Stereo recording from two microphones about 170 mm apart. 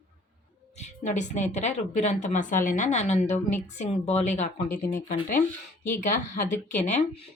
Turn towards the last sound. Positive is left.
turn(degrees=45)  # may be behind; listen again after turning